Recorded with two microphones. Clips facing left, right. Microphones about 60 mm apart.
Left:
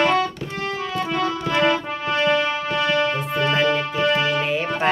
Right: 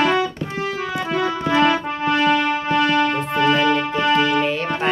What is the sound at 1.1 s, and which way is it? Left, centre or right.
Music, centre.